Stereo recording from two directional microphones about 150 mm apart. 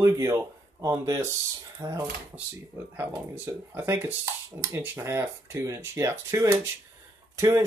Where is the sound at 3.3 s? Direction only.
15° right (ahead or behind).